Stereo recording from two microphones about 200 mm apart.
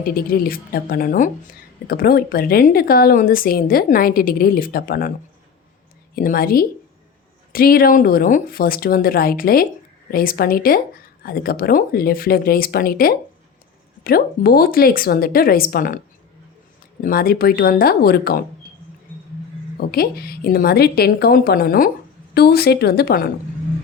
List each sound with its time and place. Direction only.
0.0 s speech: 45° left (ahead or behind)
6.1 s speech: 45° left (ahead or behind)
19.9 s speech: 50° left (ahead or behind)